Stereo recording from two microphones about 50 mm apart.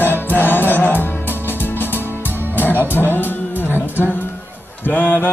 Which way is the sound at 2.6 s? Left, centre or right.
Left.